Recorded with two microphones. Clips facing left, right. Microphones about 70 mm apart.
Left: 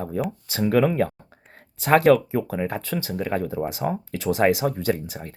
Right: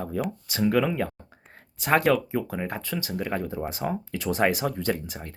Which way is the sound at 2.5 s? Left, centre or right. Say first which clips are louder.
Left 4 dB; left.